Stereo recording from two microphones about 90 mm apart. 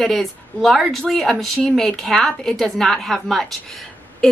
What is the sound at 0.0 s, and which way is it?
A woman's voice, centre (ahead or behind).